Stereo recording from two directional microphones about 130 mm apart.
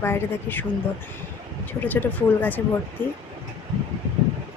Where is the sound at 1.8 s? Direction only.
15° left (ahead or behind).